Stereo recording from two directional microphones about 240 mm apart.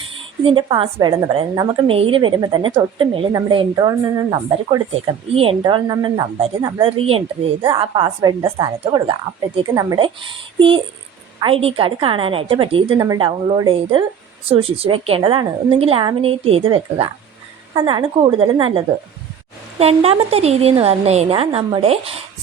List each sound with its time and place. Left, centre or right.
0.4 s a woman's voice: right